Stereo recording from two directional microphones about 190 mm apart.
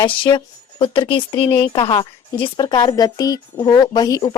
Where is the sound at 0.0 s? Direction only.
25° left (ahead or behind).